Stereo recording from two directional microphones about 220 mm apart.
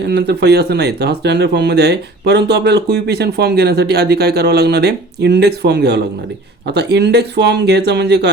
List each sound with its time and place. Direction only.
0.0 s speech: 50° right (ahead or behind)